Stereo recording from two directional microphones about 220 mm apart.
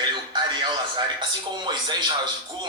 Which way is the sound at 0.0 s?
20° right (ahead or behind).